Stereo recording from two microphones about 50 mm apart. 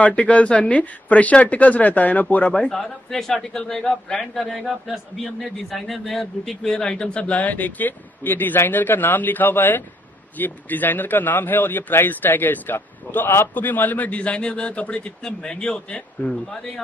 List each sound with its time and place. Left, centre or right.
0.0 s a man's voice: left
2.6 s a man's voice: centre
6.7 s a man's voice: centre
7.2 s a man's voice: left; by 16.8 s centre